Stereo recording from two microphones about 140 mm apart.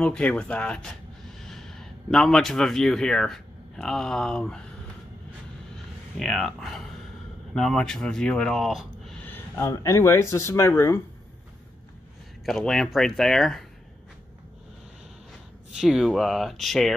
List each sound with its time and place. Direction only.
0.0 s speech: 5° left (ahead or behind)
6.1 s speech: centre (ahead or behind)
9.2 s speech: 15° left (ahead or behind)
12.4 s speech: centre (ahead or behind)
15.7 s speech: centre (ahead or behind)